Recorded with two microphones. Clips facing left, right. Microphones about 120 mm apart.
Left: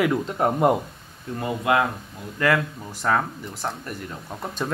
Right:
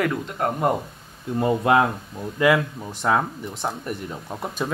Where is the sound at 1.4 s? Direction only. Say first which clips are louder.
Right 3 dB; 30° right (ahead or behind).